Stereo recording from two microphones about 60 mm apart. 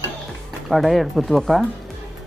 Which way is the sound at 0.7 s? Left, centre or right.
Centre.